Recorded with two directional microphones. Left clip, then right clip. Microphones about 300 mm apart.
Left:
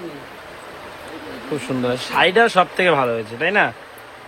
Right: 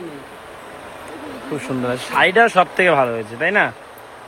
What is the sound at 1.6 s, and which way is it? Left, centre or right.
A man's voice, centre.